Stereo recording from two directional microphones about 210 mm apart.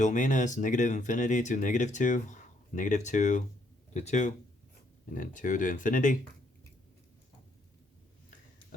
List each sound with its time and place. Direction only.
0.0 s speech: 35° left (ahead or behind)